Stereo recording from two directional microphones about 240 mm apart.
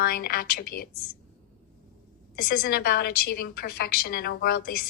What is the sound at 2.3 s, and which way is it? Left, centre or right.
A woman's voice, left.